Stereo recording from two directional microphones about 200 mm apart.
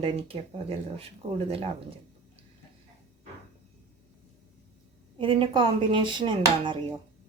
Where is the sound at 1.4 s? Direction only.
30° right (ahead or behind).